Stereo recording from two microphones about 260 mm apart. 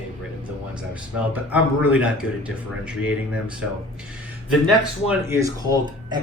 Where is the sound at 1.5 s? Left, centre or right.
Centre.